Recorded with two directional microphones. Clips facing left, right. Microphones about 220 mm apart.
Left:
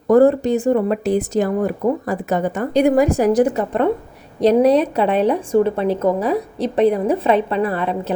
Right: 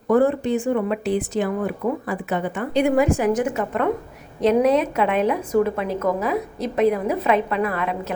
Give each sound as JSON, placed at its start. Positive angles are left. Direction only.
{"t": 0.1, "sound": "speech", "side_deg": 40}